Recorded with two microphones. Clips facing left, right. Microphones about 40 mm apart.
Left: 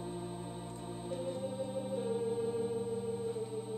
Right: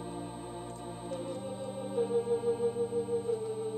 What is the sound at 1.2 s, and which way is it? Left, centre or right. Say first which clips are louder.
Organ: even; centre.